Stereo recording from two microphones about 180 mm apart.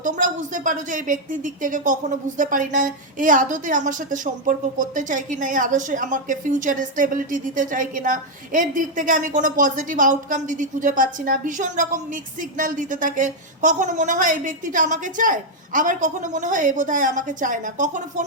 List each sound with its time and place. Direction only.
0.0 s speech: 45° right (ahead or behind)